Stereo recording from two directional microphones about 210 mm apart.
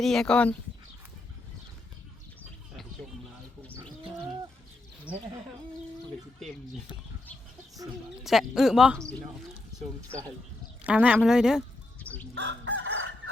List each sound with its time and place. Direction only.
0.0 s speech: centre (ahead or behind)
5.1 s speech: 5° right (ahead or behind)
8.2 s speech: centre (ahead or behind)
10.8 s speech: 5° right (ahead or behind)
12.3 s chicken: 60° right (ahead or behind)